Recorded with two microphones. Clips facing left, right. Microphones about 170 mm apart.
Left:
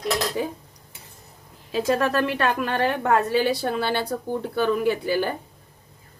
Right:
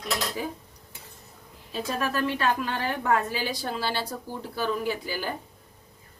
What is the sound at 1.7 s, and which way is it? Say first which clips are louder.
A woman's voice: left 7 dB; 85° left.